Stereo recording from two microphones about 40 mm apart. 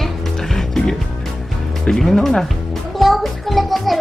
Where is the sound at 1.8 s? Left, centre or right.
Centre.